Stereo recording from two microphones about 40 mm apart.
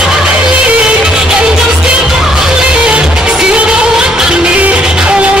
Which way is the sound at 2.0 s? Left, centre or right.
Centre.